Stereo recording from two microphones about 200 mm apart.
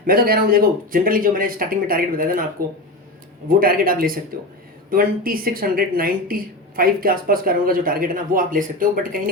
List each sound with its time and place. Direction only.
0.0 s speech: 50° right (ahead or behind)